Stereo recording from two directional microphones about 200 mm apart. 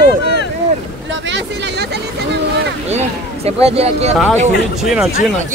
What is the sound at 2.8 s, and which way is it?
Speech, 30° right (ahead or behind).